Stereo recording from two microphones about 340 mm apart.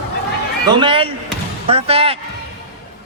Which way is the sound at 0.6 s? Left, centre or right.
Centre.